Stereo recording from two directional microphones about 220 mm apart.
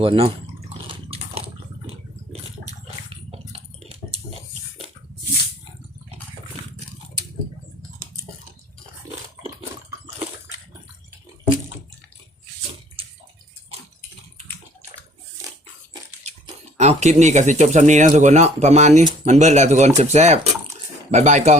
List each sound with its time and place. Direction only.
0.0 s speech: 25° right (ahead or behind)
0.7 s a sound: 25° right (ahead or behind)
13.0 s bathtub: 25° right (ahead or behind)
16.7 s speech: 30° right (ahead or behind)